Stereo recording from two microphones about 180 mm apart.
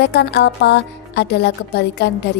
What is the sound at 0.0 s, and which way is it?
A woman's voice, 70° left (ahead or behind).